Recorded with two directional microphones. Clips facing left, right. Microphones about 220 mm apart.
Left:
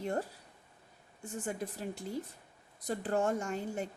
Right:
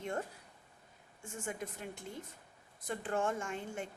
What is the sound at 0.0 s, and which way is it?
A woman's voice, 35° left (ahead or behind).